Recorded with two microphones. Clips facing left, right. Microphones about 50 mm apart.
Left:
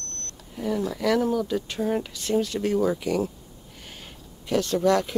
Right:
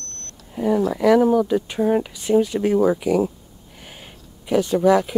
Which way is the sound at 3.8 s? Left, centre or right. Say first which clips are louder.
Right 2 dB; centre.